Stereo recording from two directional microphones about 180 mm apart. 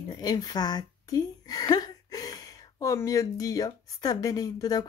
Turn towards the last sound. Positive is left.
turn(degrees=20)  # may be behind; listen again after turning